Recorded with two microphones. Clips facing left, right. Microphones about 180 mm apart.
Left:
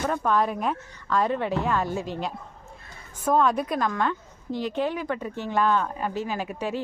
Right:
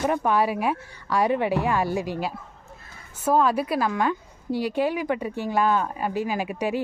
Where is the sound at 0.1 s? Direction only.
15° right (ahead or behind).